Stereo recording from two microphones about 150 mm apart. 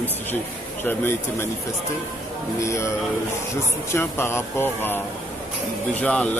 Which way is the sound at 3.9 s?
15° left (ahead or behind).